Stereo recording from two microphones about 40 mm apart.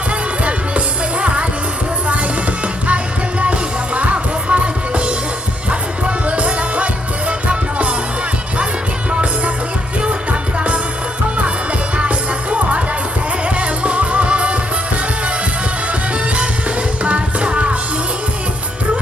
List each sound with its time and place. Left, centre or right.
3.4 s music: right
6.2 s music: right
9.0 s music: right
11.9 s music: right
15.9 s music: right